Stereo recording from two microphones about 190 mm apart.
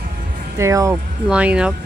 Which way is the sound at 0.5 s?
15° right (ahead or behind).